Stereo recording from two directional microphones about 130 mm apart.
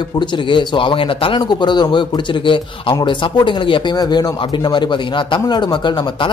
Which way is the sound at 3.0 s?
40° left (ahead or behind).